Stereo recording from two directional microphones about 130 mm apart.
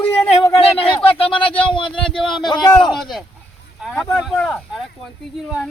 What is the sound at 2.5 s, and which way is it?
Speech, 35° left (ahead or behind).